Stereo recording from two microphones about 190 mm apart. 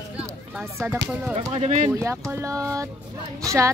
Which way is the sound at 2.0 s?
15° right (ahead or behind).